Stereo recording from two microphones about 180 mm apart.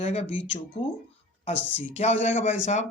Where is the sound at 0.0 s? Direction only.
35° left (ahead or behind).